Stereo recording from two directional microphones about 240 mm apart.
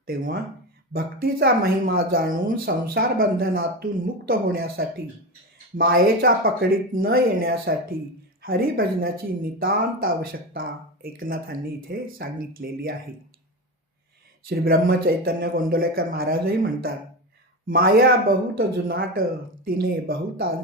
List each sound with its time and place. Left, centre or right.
0.0 s speech: right
14.4 s speech: right